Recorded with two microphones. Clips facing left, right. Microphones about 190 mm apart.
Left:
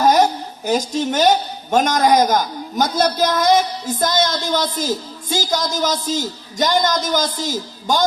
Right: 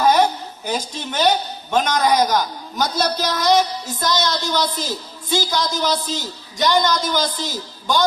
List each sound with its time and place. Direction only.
0.0 s a woman's voice: 45° left (ahead or behind)